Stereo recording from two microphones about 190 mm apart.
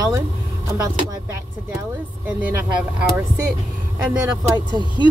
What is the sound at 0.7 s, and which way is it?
Speech, 15° right (ahead or behind).